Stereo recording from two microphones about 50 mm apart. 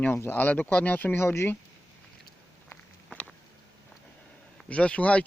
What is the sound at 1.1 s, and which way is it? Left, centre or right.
Speech, left.